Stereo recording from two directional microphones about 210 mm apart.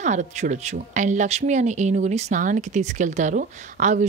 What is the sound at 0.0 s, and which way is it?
Speech, 35° right (ahead or behind).